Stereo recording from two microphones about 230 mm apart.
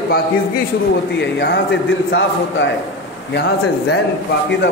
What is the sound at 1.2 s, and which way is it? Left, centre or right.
A man's voice, left.